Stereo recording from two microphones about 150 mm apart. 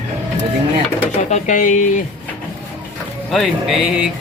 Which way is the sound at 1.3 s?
60° left (ahead or behind).